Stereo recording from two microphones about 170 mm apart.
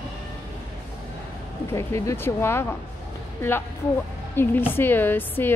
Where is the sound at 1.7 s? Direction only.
15° left (ahead or behind).